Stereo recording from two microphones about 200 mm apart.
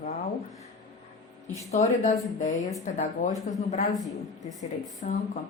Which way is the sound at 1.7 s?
35° left (ahead or behind).